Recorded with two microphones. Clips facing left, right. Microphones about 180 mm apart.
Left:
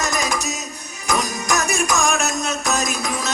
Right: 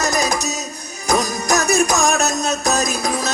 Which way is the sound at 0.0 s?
40° right (ahead or behind).